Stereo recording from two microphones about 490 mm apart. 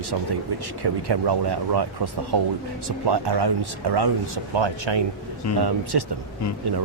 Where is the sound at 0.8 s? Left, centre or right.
Right.